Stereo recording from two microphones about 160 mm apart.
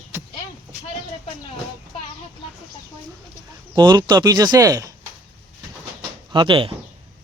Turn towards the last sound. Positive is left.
turn(degrees=-30)  # may be behind; listen again after turning